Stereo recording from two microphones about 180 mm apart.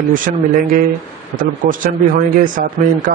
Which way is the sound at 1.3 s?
50° right (ahead or behind).